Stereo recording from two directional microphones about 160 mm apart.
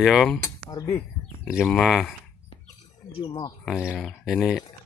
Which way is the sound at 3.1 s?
35° left (ahead or behind).